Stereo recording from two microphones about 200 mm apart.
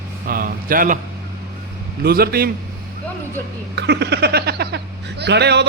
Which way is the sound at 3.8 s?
60° right (ahead or behind).